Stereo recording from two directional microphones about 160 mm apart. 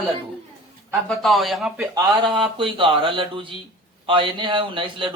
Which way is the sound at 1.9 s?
25° right (ahead or behind).